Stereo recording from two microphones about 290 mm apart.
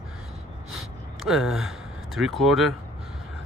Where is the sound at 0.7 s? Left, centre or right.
Centre.